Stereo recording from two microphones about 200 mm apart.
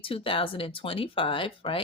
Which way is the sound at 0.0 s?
25° left (ahead or behind).